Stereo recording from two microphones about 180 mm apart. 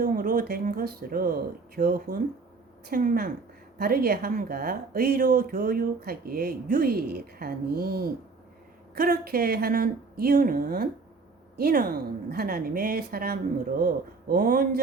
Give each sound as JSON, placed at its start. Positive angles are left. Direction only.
{"t": 0.0, "sound": "speech", "side_deg": -50}